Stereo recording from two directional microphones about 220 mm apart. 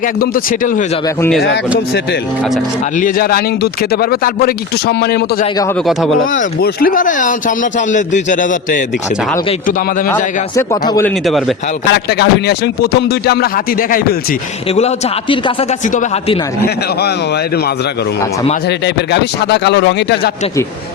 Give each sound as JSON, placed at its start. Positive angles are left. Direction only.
{"t": 0.2, "sound": "a man's voice", "side_deg": 40}
{"t": 3.0, "sound": "speech", "side_deg": 40}
{"t": 5.8, "sound": "speech", "side_deg": 0}
{"t": 6.3, "sound": "a man's voice", "side_deg": 45}
{"t": 10.5, "sound": "a man's voice", "side_deg": 15}
{"t": 11.0, "sound": "speech", "side_deg": 0}
{"t": 11.9, "sound": "speech", "side_deg": 50}
{"t": 14.8, "sound": "a man's voice", "side_deg": 25}
{"t": 19.1, "sound": "speech", "side_deg": 50}